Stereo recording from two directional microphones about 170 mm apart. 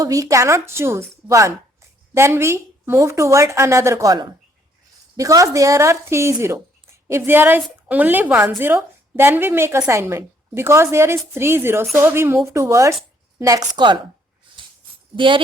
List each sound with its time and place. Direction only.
0.0 s a woman's voice: 20° right (ahead or behind)
15.1 s speech: 30° right (ahead or behind)